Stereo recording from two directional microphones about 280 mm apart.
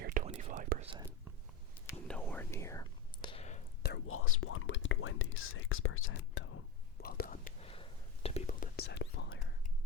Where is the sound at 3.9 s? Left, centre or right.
Left.